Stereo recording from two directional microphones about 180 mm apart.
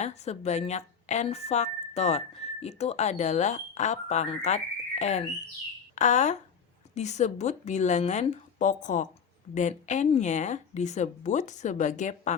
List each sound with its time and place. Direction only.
0.0 s speech: 40° left (ahead or behind)